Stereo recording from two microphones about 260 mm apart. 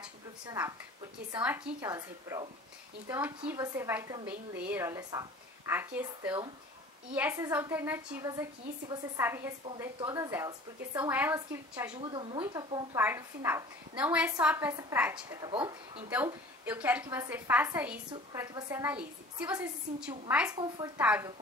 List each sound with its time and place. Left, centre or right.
0.5 s a woman's voice: centre
16.6 s a woman's voice: centre
21.0 s a woman's voice: centre